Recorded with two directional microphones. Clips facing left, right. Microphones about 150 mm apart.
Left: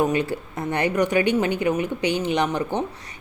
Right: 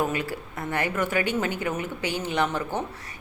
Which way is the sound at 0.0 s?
20° left (ahead or behind).